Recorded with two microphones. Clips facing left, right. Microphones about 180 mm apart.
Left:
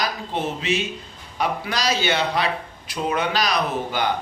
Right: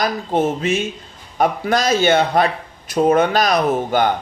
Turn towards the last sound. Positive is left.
turn(degrees=-50)  # may be behind; listen again after turning